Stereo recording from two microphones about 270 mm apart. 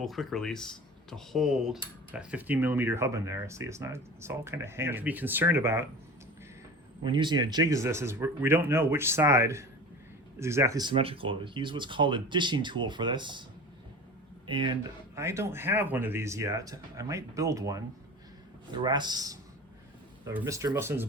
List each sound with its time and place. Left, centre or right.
0.0 s speech: centre
7.0 s speech: centre
14.4 s speech: centre